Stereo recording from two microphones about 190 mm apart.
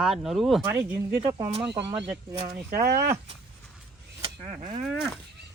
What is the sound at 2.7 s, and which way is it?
Speech, 55° right (ahead or behind).